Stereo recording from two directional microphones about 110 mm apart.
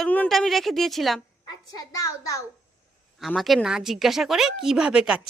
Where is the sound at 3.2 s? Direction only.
Centre (ahead or behind).